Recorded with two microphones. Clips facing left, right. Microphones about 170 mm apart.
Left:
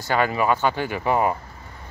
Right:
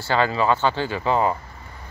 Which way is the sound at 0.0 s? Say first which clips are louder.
Right 1 dB; 15° left (ahead or behind).